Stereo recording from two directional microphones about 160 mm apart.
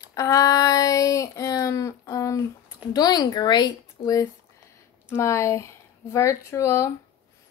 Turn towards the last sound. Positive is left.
turn(degrees=15)  # may be behind; listen again after turning